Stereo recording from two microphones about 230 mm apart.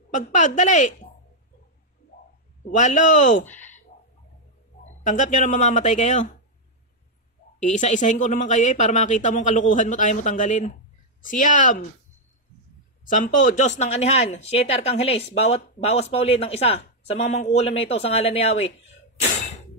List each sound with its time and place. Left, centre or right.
0.1 s speech: left
2.7 s speech: left
5.0 s speech: left
7.6 s speech: left
13.1 s speech: left